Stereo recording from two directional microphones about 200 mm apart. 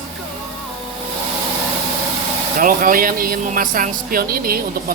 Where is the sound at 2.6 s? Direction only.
45° right (ahead or behind).